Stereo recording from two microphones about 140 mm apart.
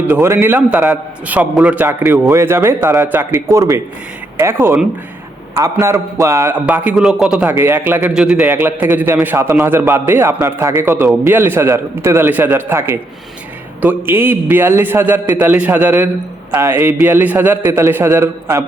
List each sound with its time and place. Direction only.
0.1 s a man's voice: 20° right (ahead or behind)
1.9 s a man's voice: 25° right (ahead or behind)
5.8 s a man's voice: 20° right (ahead or behind)
6.8 s a man's voice: 5° right (ahead or behind)
7.5 s a man's voice: 15° right (ahead or behind)